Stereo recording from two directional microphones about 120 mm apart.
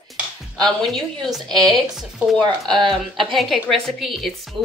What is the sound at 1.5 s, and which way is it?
Speech, 35° right (ahead or behind).